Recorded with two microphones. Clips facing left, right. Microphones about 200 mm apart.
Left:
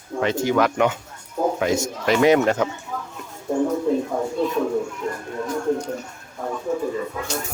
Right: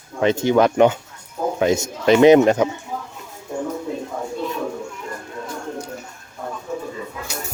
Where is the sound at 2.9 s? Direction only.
25° right (ahead or behind).